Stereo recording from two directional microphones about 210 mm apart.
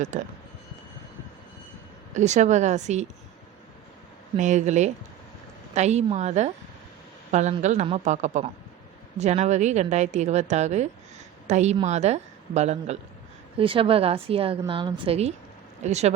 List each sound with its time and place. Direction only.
0.1 s a woman's voice: 35° right (ahead or behind)
2.1 s a woman's voice: 35° right (ahead or behind)
4.4 s a woman's voice: 35° right (ahead or behind)